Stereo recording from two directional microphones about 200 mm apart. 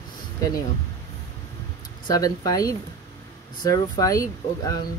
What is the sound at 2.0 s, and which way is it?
Speech, 20° left (ahead or behind).